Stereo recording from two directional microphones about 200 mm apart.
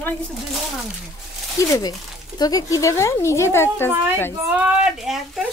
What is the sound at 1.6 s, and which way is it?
Speech, 15° left (ahead or behind).